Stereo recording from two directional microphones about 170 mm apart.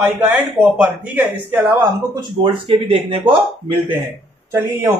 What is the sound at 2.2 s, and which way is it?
A man's voice, 30° right (ahead or behind).